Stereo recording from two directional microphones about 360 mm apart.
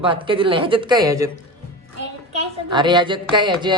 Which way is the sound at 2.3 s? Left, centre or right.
Centre.